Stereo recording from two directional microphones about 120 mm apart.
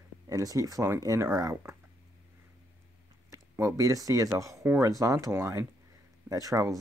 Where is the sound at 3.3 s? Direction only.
25° right (ahead or behind).